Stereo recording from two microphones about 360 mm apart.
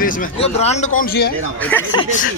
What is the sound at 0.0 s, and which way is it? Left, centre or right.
A man's voice, centre.